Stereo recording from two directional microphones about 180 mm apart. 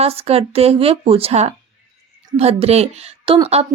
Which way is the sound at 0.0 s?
35° right (ahead or behind).